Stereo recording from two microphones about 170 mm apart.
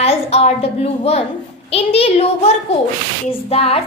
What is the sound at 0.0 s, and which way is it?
A woman's voice, 35° left (ahead or behind).